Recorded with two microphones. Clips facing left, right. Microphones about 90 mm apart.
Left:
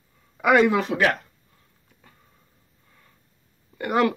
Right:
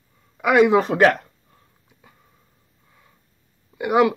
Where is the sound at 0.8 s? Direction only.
35° right (ahead or behind).